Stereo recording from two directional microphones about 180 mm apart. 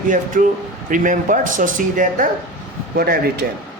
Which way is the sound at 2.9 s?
55° right (ahead or behind).